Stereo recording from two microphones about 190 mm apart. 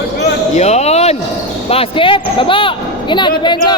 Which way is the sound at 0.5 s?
35° left (ahead or behind).